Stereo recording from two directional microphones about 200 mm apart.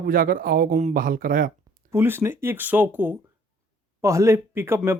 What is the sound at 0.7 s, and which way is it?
Speech, 35° right (ahead or behind).